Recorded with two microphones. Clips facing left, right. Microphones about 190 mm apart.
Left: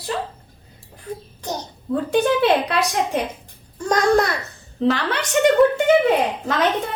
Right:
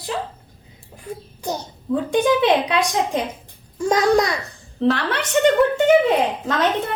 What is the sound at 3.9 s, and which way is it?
Speech, centre (ahead or behind).